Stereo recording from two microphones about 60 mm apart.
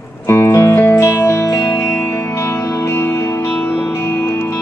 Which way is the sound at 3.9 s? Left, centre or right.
Left.